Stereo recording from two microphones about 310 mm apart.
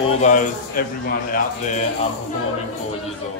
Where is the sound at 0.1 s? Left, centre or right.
Left.